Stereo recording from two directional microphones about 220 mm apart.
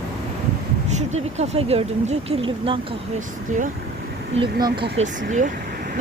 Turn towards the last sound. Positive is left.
turn(degrees=-35)  # may be behind; listen again after turning